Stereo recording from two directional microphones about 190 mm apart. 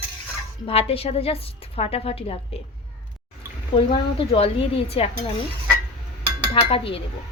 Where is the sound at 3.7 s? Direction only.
30° left (ahead or behind).